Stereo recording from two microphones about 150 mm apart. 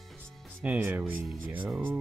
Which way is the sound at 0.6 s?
10° right (ahead or behind).